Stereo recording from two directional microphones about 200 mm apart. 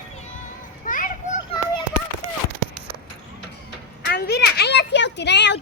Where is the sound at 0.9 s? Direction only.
40° left (ahead or behind).